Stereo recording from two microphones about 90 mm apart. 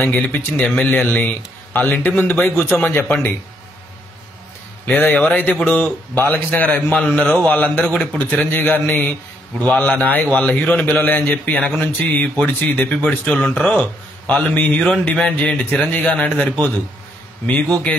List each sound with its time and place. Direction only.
0.0 s a man's voice: 20° left (ahead or behind)
4.8 s a man's voice: 15° left (ahead or behind)